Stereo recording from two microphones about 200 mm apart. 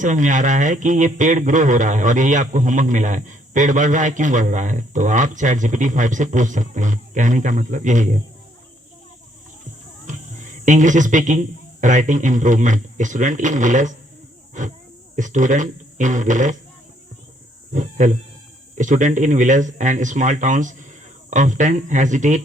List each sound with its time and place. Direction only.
0.0 s a man's voice: 40° right (ahead or behind)
10.1 s a man's voice: 40° right (ahead or behind)
17.7 s a man's voice: 40° right (ahead or behind)